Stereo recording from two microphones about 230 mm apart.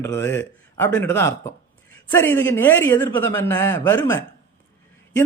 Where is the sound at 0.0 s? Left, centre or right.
Centre.